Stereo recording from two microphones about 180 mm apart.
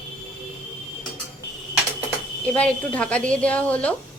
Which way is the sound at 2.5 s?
5° left (ahead or behind).